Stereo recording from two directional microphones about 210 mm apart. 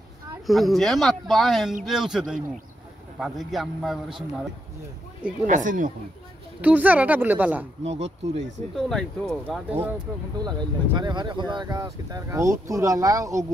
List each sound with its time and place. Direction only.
0.5 s speech: centre (ahead or behind)
5.5 s speech: 35° right (ahead or behind)
6.6 s speech: 10° right (ahead or behind)
7.8 s speech: 30° right (ahead or behind)
8.7 s speech: centre (ahead or behind)
9.7 s speech: 10° right (ahead or behind)
10.4 s speech: 20° right (ahead or behind)